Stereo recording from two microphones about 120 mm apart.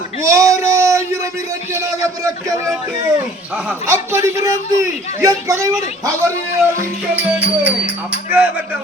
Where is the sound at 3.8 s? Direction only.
25° right (ahead or behind).